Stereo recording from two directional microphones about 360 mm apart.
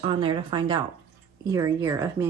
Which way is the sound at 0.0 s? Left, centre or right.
Centre.